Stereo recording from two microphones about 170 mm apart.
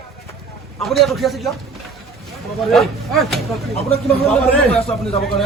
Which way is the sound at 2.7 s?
Centre (ahead or behind).